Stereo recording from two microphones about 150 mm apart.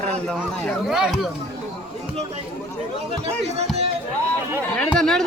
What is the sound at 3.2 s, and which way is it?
Speech, 45° right (ahead or behind).